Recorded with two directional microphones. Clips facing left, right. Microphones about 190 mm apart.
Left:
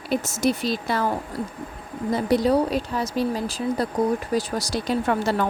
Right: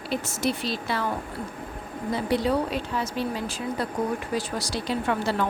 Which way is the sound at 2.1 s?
40° left (ahead or behind).